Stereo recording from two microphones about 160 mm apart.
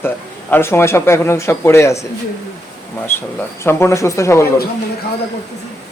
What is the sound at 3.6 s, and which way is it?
Speech, 15° left (ahead or behind).